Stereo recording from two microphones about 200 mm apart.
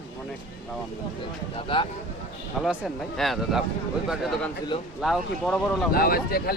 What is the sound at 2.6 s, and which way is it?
Speech, centre (ahead or behind).